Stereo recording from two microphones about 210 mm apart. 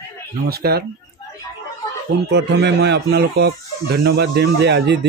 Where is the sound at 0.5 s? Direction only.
50° right (ahead or behind).